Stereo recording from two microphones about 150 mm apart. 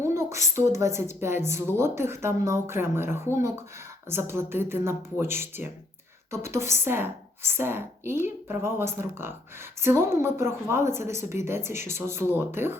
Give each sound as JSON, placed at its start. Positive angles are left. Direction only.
{"t": 0.0, "sound": "a woman's voice", "side_deg": -20}